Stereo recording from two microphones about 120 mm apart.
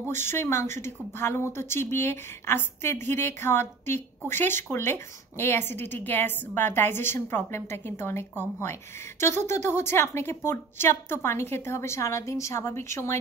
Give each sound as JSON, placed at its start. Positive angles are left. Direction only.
{"t": 0.1, "sound": "speech", "side_deg": 20}